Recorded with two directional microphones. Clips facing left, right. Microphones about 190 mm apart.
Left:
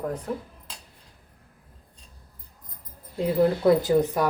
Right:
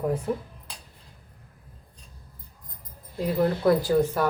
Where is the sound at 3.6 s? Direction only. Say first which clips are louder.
Right 1 dB; 20° left (ahead or behind).